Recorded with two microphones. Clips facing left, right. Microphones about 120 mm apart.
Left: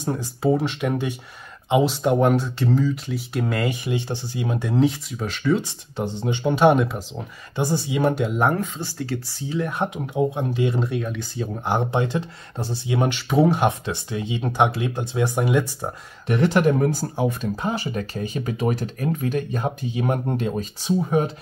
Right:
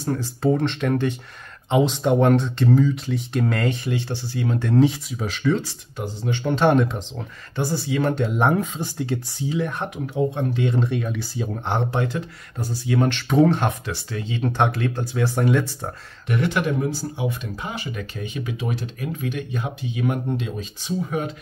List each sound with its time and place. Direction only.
0.0 s speech: 15° left (ahead or behind)
4.7 s speech: centre (ahead or behind)
5.6 s speech: 25° left (ahead or behind); by 7.1 s 5° left (ahead or behind)
7.5 s speech: 20° left (ahead or behind)
8.5 s speech: 15° right (ahead or behind)
9.5 s speech: centre (ahead or behind)
9.8 s speech: 15° left (ahead or behind); by 11.4 s 5° right (ahead or behind)
11.9 s speech: 20° left (ahead or behind)
13.3 s speech: 5° left (ahead or behind)
13.7 s speech: 20° left (ahead or behind)
16.3 s speech: 35° left (ahead or behind)
20.2 s speech: 50° left (ahead or behind)